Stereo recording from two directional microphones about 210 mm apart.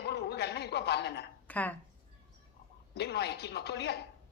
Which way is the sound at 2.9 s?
50° left (ahead or behind).